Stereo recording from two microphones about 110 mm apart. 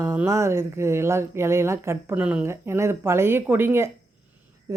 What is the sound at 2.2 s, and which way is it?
Speech, 10° right (ahead or behind).